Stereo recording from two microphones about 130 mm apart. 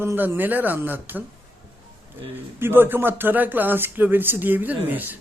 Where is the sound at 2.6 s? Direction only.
15° right (ahead or behind).